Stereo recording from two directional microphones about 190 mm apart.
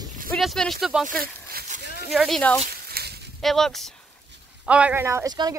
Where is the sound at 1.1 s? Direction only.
50° right (ahead or behind).